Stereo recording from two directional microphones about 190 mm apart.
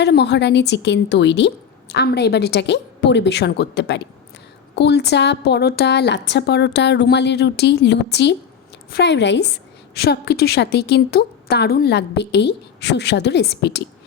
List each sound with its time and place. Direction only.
0.0 s speech: 60° left (ahead or behind)